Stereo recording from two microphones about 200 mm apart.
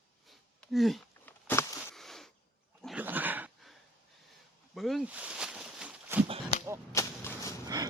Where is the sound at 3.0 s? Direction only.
10° right (ahead or behind).